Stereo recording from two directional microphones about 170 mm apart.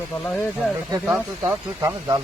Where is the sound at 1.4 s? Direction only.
20° right (ahead or behind).